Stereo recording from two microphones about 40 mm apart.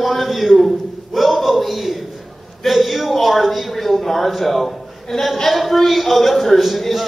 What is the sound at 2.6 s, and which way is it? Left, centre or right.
A man's voice, centre.